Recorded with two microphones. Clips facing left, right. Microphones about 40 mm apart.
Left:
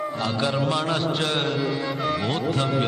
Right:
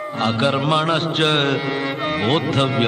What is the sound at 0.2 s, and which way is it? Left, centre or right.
Speech, right.